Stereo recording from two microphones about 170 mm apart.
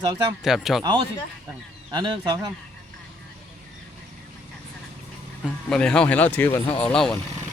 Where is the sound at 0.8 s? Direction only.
30° right (ahead or behind).